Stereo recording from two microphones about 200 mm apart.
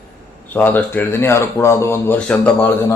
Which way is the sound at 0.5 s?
10° left (ahead or behind).